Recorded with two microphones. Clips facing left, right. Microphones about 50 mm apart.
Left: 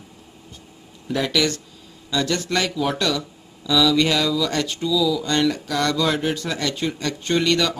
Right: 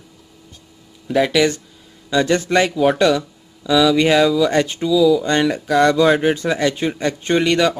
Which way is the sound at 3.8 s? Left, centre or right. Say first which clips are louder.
Right 6 dB; right.